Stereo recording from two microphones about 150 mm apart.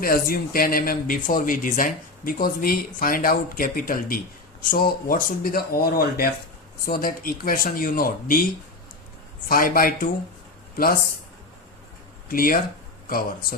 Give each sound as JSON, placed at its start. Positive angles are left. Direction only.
{"t": 0.0, "sound": "speech", "side_deg": 80}
{"t": 9.5, "sound": "speech", "side_deg": 70}
{"t": 12.3, "sound": "speech", "side_deg": 70}